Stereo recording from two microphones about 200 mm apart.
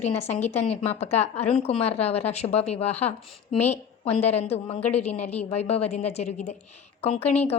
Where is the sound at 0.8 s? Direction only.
30° left (ahead or behind).